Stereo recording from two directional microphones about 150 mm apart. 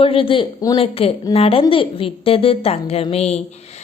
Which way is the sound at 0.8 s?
40° left (ahead or behind).